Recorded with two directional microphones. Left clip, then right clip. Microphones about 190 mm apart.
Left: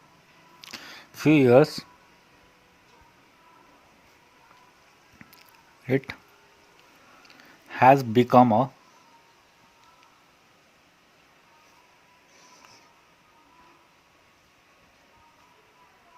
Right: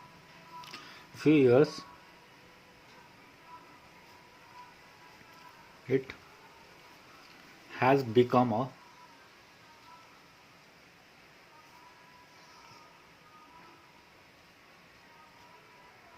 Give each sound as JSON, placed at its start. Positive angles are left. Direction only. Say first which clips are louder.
{"t": 0.6, "sound": "camera", "louder": "left 9 dB", "side_deg": 60}
{"t": 7.7, "sound": "speech", "louder": "left 9 dB", "side_deg": 55}